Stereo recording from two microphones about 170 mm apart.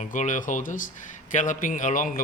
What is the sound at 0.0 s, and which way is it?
A man's voice, 45° left (ahead or behind).